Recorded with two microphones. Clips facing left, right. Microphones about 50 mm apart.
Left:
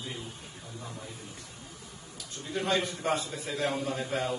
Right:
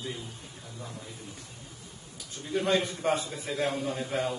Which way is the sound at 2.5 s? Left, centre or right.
Centre.